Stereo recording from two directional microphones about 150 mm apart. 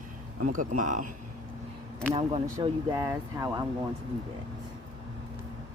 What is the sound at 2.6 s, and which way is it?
Speech, 20° right (ahead or behind).